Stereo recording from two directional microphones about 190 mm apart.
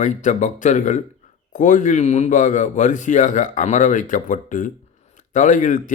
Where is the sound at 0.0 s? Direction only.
40° left (ahead or behind).